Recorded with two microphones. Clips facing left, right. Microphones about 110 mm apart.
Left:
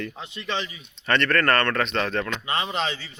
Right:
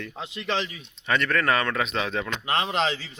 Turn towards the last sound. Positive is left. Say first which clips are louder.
# right 2 dB
turn(degrees=-90)